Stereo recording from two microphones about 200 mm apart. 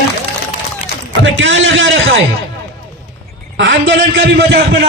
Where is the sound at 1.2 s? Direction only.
65° right (ahead or behind).